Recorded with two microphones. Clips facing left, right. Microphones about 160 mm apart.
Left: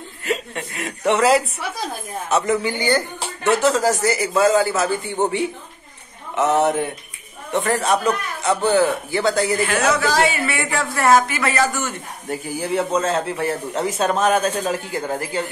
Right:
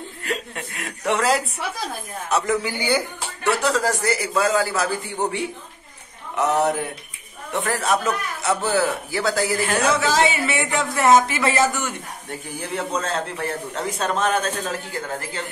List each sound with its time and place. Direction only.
0.2 s a man's voice: centre (ahead or behind)
3.6 s a man's voice: 5° left (ahead or behind)
6.3 s a man's voice: centre (ahead or behind)
9.8 s speech: 25° right (ahead or behind)
12.3 s a man's voice: 5° left (ahead or behind)